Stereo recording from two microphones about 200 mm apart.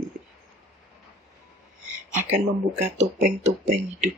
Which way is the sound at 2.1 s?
40° right (ahead or behind).